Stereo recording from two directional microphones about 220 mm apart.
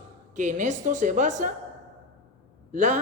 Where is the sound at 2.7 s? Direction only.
35° right (ahead or behind).